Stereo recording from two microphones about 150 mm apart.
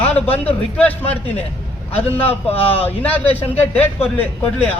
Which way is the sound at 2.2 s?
40° left (ahead or behind).